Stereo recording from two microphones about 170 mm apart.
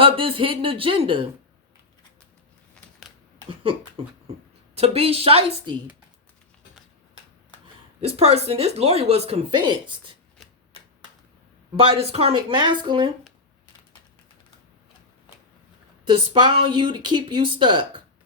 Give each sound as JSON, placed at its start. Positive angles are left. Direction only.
{"t": 0.0, "sound": "speech", "side_deg": -30}
{"t": 3.5, "sound": "beatboxing", "side_deg": -30}
{"t": 4.7, "sound": "speech", "side_deg": -35}
{"t": 8.0, "sound": "speech", "side_deg": -35}
{"t": 11.8, "sound": "speech", "side_deg": -35}
{"t": 16.0, "sound": "speech", "side_deg": -25}